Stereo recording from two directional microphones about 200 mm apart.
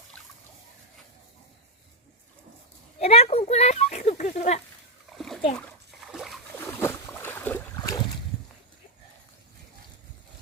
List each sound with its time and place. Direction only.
3.0 s speech: 30° left (ahead or behind)
5.0 s splash: centre (ahead or behind)
6.7 s boat: 10° left (ahead or behind)
7.8 s boat: 20° left (ahead or behind)